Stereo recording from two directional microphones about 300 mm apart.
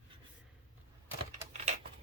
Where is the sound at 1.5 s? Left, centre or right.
Right.